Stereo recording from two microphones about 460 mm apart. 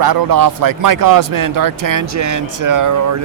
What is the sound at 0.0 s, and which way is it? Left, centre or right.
A man's voice, right.